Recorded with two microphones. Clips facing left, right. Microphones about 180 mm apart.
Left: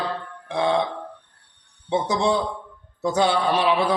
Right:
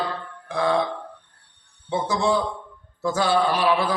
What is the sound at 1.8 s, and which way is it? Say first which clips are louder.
A man's voice: left 1 dB; 20° left (ahead or behind).